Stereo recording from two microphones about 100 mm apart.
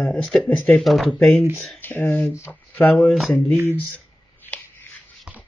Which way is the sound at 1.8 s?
20° left (ahead or behind).